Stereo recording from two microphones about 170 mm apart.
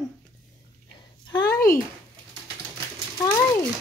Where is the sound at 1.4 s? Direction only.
55° left (ahead or behind).